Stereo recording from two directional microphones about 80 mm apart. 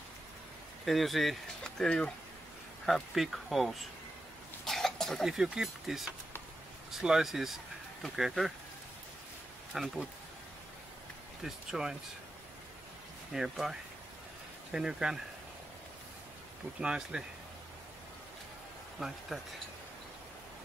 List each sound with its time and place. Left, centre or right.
0.8 s speech: centre
2.8 s speech: centre
9.7 s speech: centre
11.4 s speech: centre
13.3 s speech: centre
16.8 s speech: centre
18.9 s speech: centre